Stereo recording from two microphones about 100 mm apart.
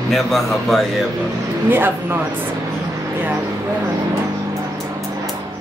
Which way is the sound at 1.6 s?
20° right (ahead or behind).